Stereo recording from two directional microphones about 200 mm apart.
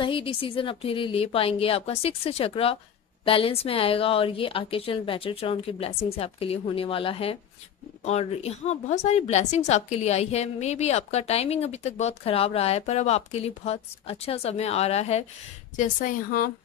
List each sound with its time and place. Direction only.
0.0 s a woman's voice: 25° left (ahead or behind); by 16.4 s 45° left (ahead or behind)